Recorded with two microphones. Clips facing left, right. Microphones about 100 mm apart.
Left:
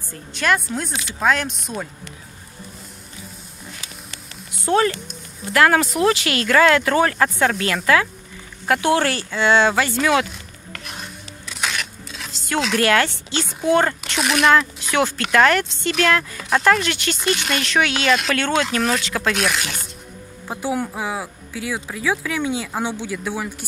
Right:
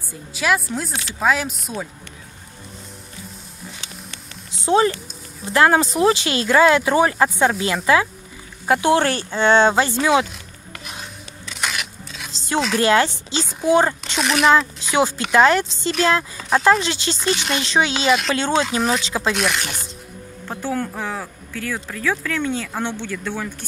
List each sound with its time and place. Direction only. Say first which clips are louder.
0.1 s speech: even; 5° right (ahead or behind)
4.5 s a sound: right 1 dB; 20° right (ahead or behind)
5.4 s speech: right 1 dB; 25° right (ahead or behind)
10.7 s dishes: left 1 dB; centre (ahead or behind)
12.3 s chopping: right 1 dB; 25° right (ahead or behind)
12.7 s speech: right 1 dB; 20° right (ahead or behind)
14.1 s speech: even; centre (ahead or behind)
14.9 s speech: right 2 dB; 20° right (ahead or behind)
16.3 s speech: right 2 dB; 5° right (ahead or behind)
16.7 s speech: right 1 dB; 20° right (ahead or behind)
17.2 s speech: right 1 dB; centre (ahead or behind)
17.6 s speech: even; 20° right (ahead or behind)
19.3 s speech: even; centre (ahead or behind)
20.4 s speech: left 1 dB; 10° left (ahead or behind)